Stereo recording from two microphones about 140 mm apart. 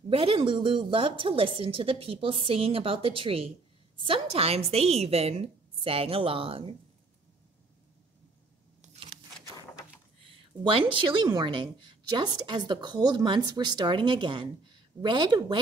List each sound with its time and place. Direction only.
0.1 s a woman's voice: 40° right (ahead or behind)
9.0 s a sound: 35° right (ahead or behind)
10.6 s a woman's voice: 35° right (ahead or behind)